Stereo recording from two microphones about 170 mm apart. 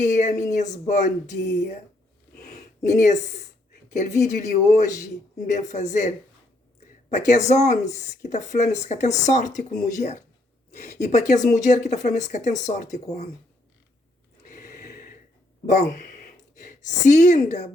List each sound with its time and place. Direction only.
0.0 s speech: 45° left (ahead or behind)
2.8 s speech: 45° left (ahead or behind)
14.4 s gasp: 50° left (ahead or behind)
15.6 s speech: 45° left (ahead or behind)